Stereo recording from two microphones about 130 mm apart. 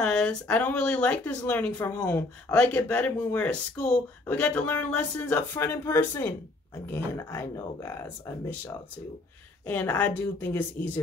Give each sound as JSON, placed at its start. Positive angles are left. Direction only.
{"t": 0.0, "sound": "speech", "side_deg": 5}
{"t": 9.7, "sound": "speech", "side_deg": 10}